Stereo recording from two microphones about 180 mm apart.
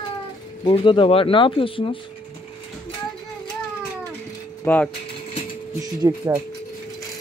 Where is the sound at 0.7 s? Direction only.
30° left (ahead or behind).